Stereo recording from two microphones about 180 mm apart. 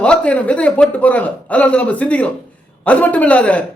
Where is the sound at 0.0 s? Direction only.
5° left (ahead or behind).